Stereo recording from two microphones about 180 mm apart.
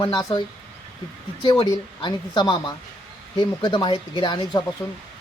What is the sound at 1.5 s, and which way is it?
Speech, 20° left (ahead or behind).